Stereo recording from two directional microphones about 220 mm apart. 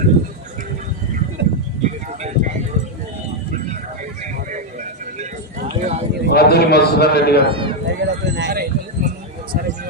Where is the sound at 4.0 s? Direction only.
35° right (ahead or behind).